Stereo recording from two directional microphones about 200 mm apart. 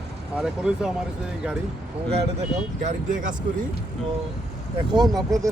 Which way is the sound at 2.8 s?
40° right (ahead or behind).